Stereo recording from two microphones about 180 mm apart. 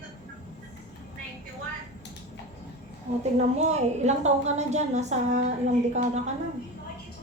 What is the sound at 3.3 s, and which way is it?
A woman's voice, 40° right (ahead or behind).